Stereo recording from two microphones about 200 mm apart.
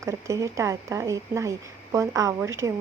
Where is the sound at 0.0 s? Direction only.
15° right (ahead or behind).